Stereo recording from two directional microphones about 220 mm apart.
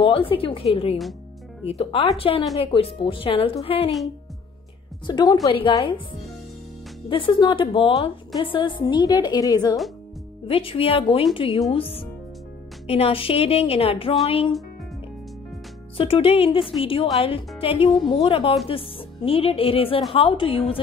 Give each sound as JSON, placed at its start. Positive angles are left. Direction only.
{"t": 0.0, "sound": "a woman's voice", "side_deg": 25}
{"t": 5.0, "sound": "a woman's voice", "side_deg": 20}
{"t": 7.1, "sound": "a woman's voice", "side_deg": 20}
{"t": 16.0, "sound": "a woman's voice", "side_deg": 25}